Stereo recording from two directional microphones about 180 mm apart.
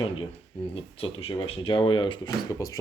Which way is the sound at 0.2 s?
30° left (ahead or behind).